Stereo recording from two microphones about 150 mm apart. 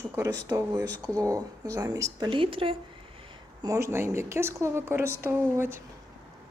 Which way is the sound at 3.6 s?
20° right (ahead or behind).